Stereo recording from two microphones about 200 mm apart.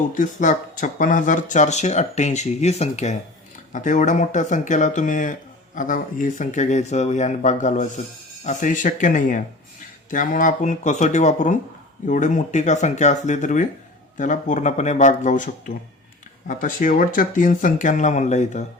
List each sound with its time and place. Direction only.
0.1 s speech: 40° left (ahead or behind)